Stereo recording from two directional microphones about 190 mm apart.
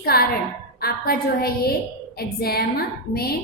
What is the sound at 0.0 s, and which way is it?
A woman's voice, 55° left (ahead or behind).